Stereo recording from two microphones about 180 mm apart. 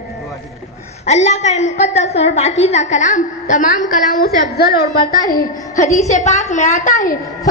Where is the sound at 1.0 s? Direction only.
40° left (ahead or behind).